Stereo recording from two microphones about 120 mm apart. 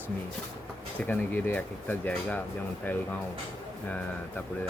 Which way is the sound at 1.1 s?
15° left (ahead or behind).